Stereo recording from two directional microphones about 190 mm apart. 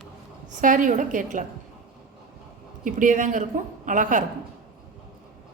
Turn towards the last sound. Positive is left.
turn(degrees=-45)  # may be behind; listen again after turning